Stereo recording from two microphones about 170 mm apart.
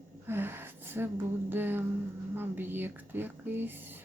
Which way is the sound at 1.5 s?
10° right (ahead or behind).